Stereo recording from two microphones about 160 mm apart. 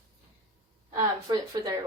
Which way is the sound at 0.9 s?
20° right (ahead or behind).